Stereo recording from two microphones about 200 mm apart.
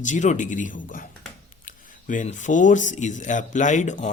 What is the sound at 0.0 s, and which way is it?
Speech, 35° left (ahead or behind).